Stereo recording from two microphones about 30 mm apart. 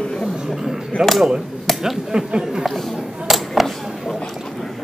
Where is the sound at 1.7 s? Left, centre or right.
Centre.